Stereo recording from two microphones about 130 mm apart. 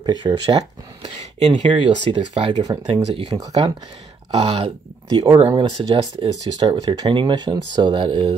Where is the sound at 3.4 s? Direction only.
30° right (ahead or behind).